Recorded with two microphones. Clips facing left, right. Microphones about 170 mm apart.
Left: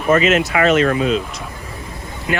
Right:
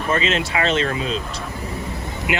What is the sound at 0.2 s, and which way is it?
Speech, 30° right (ahead or behind).